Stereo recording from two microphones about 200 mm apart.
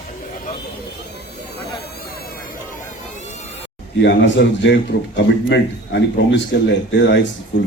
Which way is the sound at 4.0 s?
60° left (ahead or behind).